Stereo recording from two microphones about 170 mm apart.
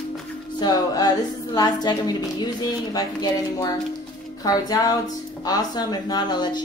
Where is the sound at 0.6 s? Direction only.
25° left (ahead or behind).